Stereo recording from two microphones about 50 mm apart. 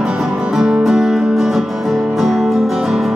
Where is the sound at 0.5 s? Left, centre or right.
Centre.